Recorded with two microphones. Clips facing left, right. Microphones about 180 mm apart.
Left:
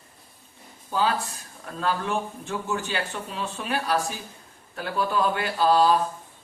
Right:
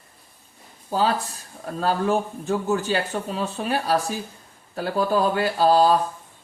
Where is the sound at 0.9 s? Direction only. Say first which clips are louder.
Right 3 dB; 35° right (ahead or behind).